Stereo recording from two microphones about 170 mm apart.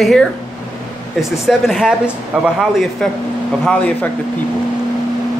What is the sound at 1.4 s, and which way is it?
Speech, centre (ahead or behind).